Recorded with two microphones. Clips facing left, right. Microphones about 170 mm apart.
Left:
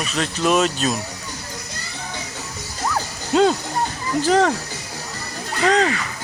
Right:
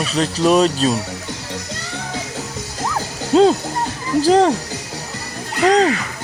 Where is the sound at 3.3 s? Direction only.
30° right (ahead or behind).